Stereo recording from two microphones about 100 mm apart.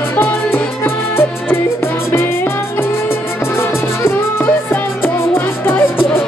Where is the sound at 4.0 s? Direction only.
25° left (ahead or behind).